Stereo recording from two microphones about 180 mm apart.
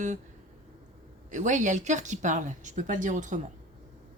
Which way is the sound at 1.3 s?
45° right (ahead or behind).